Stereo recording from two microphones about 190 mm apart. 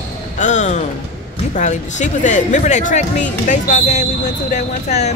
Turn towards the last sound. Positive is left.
turn(degrees=35)  # may be behind; listen again after turning